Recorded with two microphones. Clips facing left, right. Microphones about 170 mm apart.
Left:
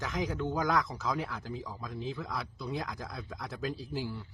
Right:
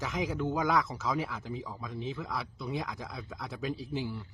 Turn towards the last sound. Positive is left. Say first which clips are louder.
# right 1 dB
turn(degrees=0)  # may be behind; listen again after turning